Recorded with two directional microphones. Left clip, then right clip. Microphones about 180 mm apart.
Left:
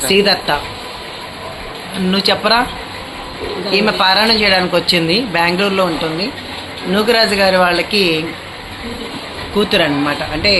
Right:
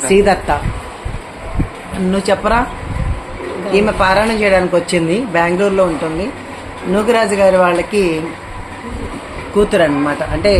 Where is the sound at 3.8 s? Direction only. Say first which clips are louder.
Even; 10° right (ahead or behind).